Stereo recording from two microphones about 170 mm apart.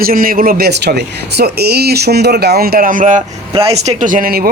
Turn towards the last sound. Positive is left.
turn(degrees=-60)  # may be behind; listen again after turning